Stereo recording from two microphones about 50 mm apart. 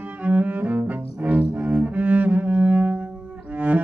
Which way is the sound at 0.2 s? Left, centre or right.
Right.